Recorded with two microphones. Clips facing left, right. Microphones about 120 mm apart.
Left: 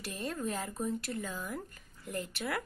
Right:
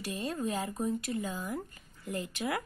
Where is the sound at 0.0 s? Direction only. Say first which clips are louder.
Right 3 dB; 10° right (ahead or behind).